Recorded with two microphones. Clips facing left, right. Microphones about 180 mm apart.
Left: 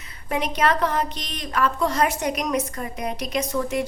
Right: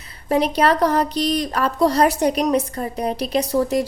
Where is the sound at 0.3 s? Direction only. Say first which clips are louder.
Right 5 dB; 35° right (ahead or behind).